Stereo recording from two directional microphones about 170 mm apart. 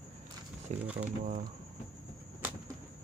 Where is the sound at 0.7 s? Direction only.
45° right (ahead or behind).